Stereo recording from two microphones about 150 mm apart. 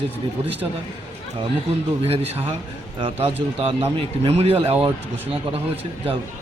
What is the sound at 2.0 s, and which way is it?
Speech, 40° right (ahead or behind).